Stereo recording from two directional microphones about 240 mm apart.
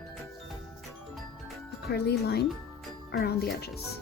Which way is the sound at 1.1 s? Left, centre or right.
Centre.